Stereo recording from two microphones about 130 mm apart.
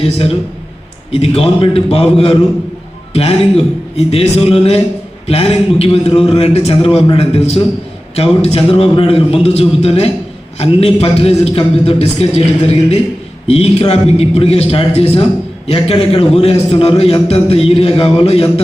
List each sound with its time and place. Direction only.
0.0 s a man's voice: 45° left (ahead or behind)
13.5 s a man's voice: 50° left (ahead or behind)